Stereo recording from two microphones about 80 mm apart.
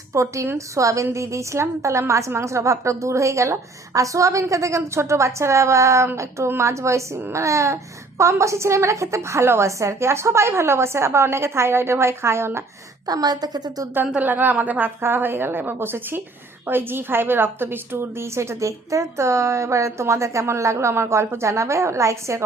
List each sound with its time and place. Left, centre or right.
0.1 s a woman's voice: right
13.1 s a woman's voice: right
14.2 s a woman's voice: right